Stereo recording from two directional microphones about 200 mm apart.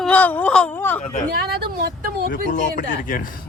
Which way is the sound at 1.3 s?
50° right (ahead or behind).